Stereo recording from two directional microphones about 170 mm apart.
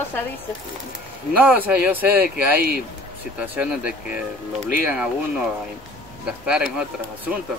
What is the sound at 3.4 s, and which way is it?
Speech, 5° right (ahead or behind).